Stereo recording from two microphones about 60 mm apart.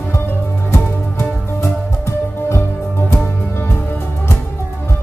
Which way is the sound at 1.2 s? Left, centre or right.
Left.